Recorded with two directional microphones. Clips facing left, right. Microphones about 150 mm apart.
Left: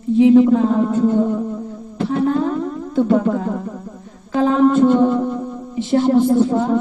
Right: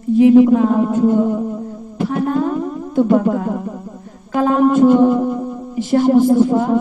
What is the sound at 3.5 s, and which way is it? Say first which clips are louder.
Speech: right 2 dB; 15° right (ahead or behind).